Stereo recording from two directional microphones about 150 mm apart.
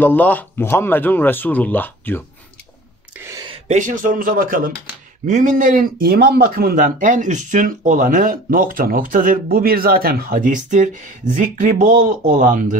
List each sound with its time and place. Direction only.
0.0 s speech: 10° left (ahead or behind)
3.2 s a sound: 20° right (ahead or behind)
3.4 s speech: 50° right (ahead or behind); by 4.7 s 70° right (ahead or behind)
5.2 s speech: 55° right (ahead or behind)